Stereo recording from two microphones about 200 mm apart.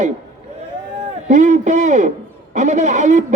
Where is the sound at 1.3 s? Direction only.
35° right (ahead or behind).